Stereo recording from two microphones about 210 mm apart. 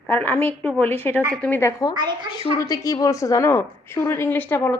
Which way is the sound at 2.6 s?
15° left (ahead or behind).